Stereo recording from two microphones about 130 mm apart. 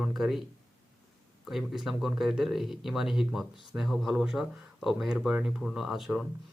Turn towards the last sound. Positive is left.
turn(degrees=0)  # may be behind; listen again after turning